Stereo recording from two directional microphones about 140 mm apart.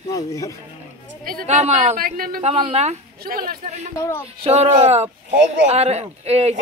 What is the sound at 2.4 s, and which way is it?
Speech, 45° right (ahead or behind).